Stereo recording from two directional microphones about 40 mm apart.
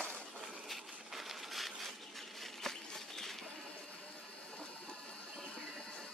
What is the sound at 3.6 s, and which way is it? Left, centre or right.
Water, left.